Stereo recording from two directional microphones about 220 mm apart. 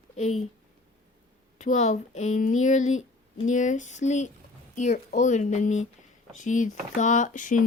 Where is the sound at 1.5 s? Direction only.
30° left (ahead or behind).